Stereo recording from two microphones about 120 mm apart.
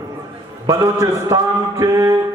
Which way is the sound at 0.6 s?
30° right (ahead or behind).